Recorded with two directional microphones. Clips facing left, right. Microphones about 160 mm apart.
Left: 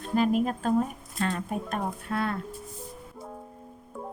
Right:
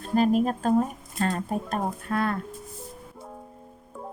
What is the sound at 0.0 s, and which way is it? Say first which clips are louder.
Speech: right 3 dB; 40° right (ahead or behind).